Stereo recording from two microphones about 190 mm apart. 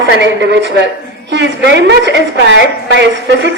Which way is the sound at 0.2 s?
65° right (ahead or behind).